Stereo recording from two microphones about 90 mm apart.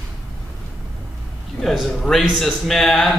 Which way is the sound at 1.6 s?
Centre (ahead or behind).